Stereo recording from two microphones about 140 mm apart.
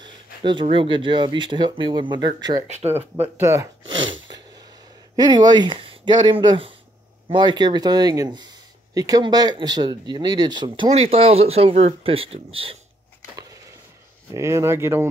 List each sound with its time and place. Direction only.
0.0 s speech: 35° right (ahead or behind)
3.2 s speech: 20° right (ahead or behind)
5.1 s speech: 30° right (ahead or behind)
10.9 s speech: 45° right (ahead or behind)
13.4 s a sound: 25° right (ahead or behind)
14.3 s speech: 20° right (ahead or behind)